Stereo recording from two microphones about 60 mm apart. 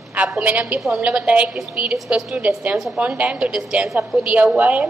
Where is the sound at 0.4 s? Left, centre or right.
Right.